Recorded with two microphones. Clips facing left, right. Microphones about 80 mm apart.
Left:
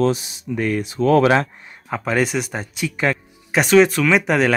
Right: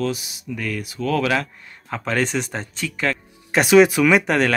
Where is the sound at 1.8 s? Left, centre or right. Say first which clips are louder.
Left 3 dB; centre.